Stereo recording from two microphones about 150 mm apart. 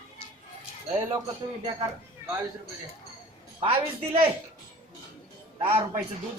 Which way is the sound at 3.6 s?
35° right (ahead or behind).